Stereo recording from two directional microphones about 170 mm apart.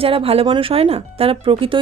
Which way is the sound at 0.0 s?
35° right (ahead or behind).